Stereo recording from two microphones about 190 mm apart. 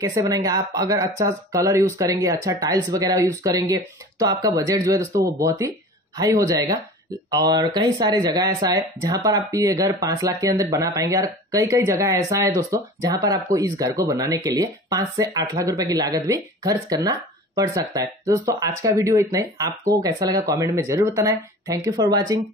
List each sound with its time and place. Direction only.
0.0 s speech: 20° right (ahead or behind)